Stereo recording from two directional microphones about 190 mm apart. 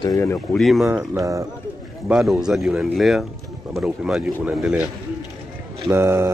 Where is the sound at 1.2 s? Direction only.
15° right (ahead or behind).